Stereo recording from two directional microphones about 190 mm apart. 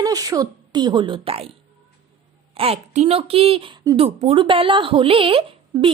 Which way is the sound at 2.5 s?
30° right (ahead or behind).